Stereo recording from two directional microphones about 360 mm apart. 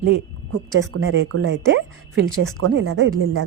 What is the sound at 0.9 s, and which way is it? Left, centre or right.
Speech, right.